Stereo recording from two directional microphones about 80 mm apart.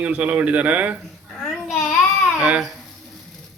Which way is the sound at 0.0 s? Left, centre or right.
Centre.